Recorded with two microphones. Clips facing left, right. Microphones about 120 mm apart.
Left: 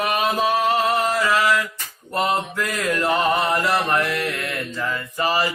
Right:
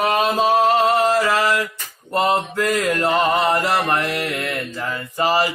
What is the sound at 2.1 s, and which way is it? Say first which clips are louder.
Mantra: right 3 dB; 25° right (ahead or behind).